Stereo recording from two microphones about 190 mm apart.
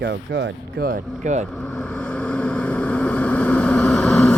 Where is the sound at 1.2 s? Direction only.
40° right (ahead or behind).